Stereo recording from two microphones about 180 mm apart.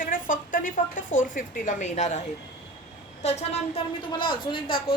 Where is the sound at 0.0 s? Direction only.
50° left (ahead or behind).